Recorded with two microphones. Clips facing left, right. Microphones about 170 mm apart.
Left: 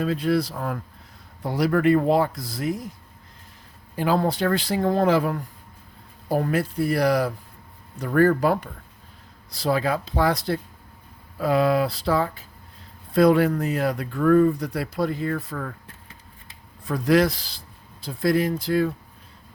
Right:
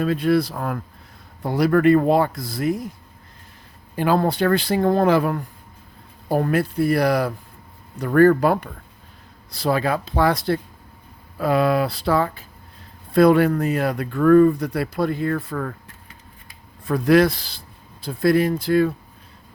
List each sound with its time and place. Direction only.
0.0 s speech: 60° right (ahead or behind)
3.9 s speech: 60° right (ahead or behind)
16.8 s speech: 60° right (ahead or behind)